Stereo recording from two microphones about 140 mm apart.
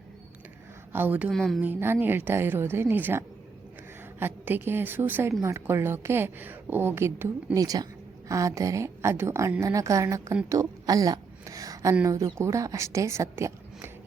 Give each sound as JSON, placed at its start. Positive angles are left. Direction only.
{"t": 0.9, "sound": "a woman's voice", "side_deg": -10}
{"t": 1.3, "sound": "speech", "side_deg": 0}
{"t": 1.6, "sound": "a woman's voice", "side_deg": -15}